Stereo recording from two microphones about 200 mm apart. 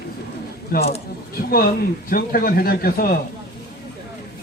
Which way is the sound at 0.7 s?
50° left (ahead or behind).